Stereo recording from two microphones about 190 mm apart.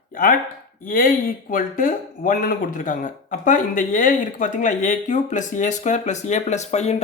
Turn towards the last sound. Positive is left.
turn(degrees=35)  # may be behind; listen again after turning